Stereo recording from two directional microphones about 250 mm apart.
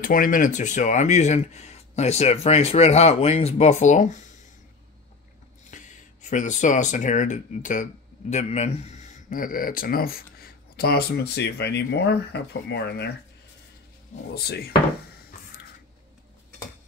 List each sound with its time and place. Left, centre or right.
0.0 s speech: left
5.7 s a sound: left
6.3 s speech: left
14.3 s speech: left